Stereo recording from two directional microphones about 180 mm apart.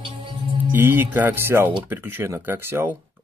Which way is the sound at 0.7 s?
10° right (ahead or behind).